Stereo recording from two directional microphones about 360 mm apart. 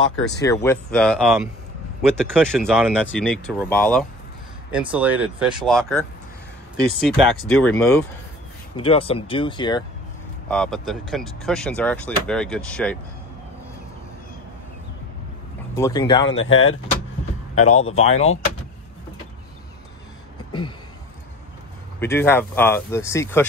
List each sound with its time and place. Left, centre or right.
0.4 s speech: centre
8.7 s speech: centre
10.5 s speech: centre
15.7 s speech: centre
16.3 s speech: left
17.6 s speech: centre
22.0 s speech: centre